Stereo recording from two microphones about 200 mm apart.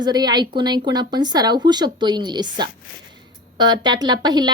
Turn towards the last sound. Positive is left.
turn(degrees=-20)  # may be behind; listen again after turning